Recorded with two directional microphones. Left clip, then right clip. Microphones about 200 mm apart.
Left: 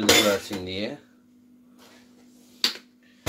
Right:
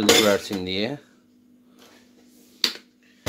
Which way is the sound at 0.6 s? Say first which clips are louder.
Right 4 dB; 55° right (ahead or behind).